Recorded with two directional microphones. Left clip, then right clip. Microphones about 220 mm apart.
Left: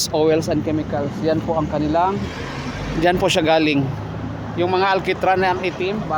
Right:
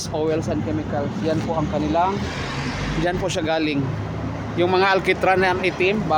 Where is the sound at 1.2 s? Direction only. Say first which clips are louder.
Left 4 dB; 40° left (ahead or behind).